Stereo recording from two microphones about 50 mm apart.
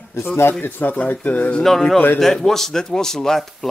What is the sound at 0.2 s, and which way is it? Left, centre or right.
Speech, left.